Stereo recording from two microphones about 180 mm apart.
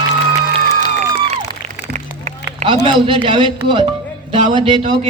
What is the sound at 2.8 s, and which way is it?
A woman's voice, 25° right (ahead or behind).